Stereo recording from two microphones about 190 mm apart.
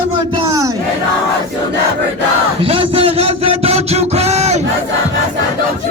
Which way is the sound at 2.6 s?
30° right (ahead or behind).